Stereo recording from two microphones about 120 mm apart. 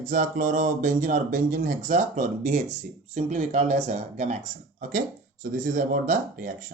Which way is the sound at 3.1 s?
80° right.